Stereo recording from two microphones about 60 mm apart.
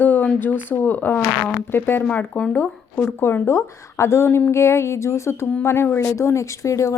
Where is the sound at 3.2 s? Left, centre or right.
Left.